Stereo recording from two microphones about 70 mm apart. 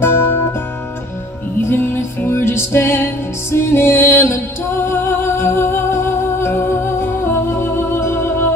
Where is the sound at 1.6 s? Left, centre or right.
Left.